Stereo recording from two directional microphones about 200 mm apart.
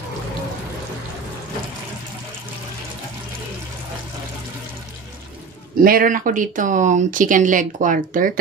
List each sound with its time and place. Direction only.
5.8 s speech: 45° right (ahead or behind)